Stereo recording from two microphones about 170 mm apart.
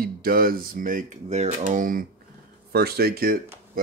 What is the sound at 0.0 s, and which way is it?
Speech, 60° right (ahead or behind).